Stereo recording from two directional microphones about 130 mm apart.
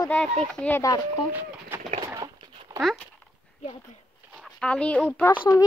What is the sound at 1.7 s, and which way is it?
Bird, 15° right (ahead or behind).